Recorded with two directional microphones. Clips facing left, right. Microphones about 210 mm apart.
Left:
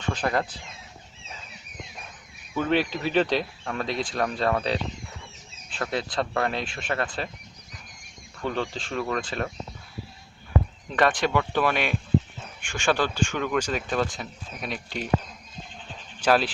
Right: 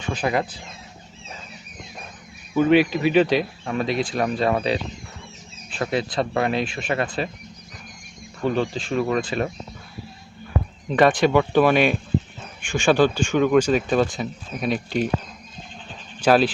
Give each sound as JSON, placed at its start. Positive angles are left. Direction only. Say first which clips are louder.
{"t": 0.1, "sound": "speech", "louder": "right 3 dB", "side_deg": -10}
{"t": 2.6, "sound": "speech", "louder": "right 8 dB", "side_deg": -10}
{"t": 8.4, "sound": "speech", "louder": "right 6 dB", "side_deg": -10}
{"t": 10.9, "sound": "speech", "louder": "right 6 dB", "side_deg": -10}
{"t": 16.2, "sound": "speech", "louder": "right 5 dB", "side_deg": -20}